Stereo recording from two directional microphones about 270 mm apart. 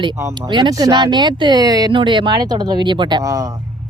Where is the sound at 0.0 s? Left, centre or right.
Centre.